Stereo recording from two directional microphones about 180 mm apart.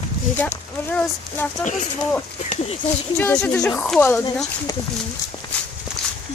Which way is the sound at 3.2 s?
10° left (ahead or behind).